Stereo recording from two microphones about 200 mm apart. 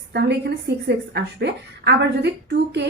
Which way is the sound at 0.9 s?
55° right (ahead or behind).